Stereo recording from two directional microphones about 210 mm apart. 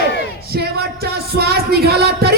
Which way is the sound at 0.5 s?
50° right (ahead or behind).